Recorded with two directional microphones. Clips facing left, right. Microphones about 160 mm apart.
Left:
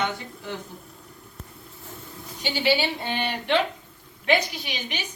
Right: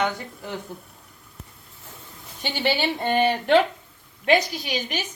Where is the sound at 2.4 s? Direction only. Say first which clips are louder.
Left 1 dB; 50° right (ahead or behind).